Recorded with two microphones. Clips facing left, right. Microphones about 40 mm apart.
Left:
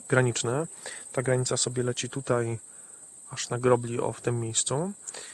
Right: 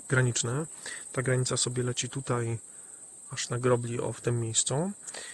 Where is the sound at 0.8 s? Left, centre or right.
Centre.